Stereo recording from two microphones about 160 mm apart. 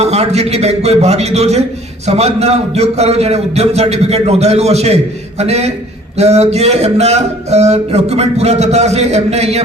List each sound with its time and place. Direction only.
0.0 s speech: 40° right (ahead or behind)